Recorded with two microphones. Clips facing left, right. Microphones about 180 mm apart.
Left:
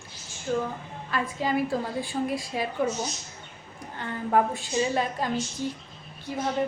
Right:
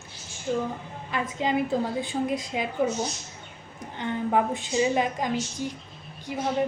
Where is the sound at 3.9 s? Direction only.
20° right (ahead or behind).